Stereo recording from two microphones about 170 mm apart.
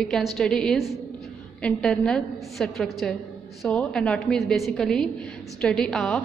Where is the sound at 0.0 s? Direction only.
5° left (ahead or behind).